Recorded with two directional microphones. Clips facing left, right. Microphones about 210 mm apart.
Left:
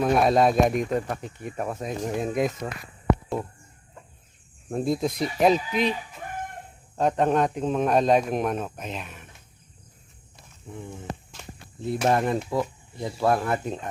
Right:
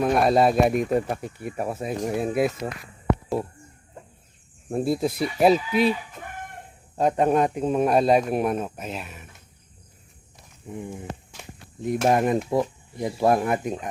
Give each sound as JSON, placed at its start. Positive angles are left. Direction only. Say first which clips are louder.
{"t": 0.0, "sound": "speech", "louder": "right 1 dB", "side_deg": 0}
{"t": 4.7, "sound": "speech", "louder": "right 2 dB", "side_deg": -5}
{"t": 6.9, "sound": "speech", "louder": "right 2 dB", "side_deg": -10}
{"t": 10.7, "sound": "a sound", "louder": "right 2 dB", "side_deg": -15}
{"t": 12.0, "sound": "speech", "louder": "right 2 dB", "side_deg": -15}